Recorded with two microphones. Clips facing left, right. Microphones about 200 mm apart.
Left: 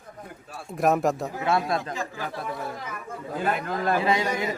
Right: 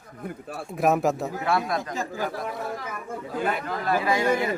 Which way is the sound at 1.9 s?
40° right (ahead or behind).